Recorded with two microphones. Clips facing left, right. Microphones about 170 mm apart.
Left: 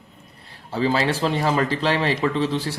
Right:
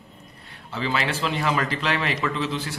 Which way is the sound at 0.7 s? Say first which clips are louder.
Left 5 dB; 35° left (ahead or behind).